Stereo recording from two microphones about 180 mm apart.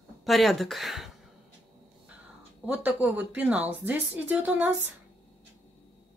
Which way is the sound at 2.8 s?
10° right (ahead or behind).